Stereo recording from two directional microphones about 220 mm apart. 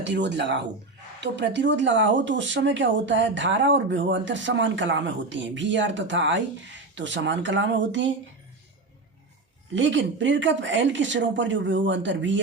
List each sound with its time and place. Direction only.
0.0 s speech: 55° right (ahead or behind)
9.7 s speech: 55° right (ahead or behind)